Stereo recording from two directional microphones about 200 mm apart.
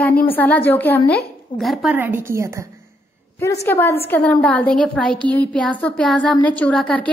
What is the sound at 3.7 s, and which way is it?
A woman's voice, 10° left (ahead or behind).